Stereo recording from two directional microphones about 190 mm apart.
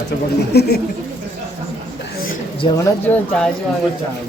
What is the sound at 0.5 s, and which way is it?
Speech, 60° left (ahead or behind).